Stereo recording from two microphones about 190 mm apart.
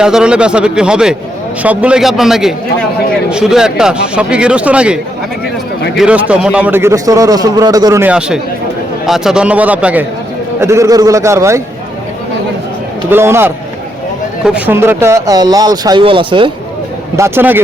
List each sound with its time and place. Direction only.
0.0 s speech: 5° right (ahead or behind)
6.0 s a man's voice: 5° right (ahead or behind)
8.0 s a man's voice: 5° right (ahead or behind)
13.1 s a man's voice: 10° right (ahead or behind)
17.2 s a man's voice: 15° right (ahead or behind)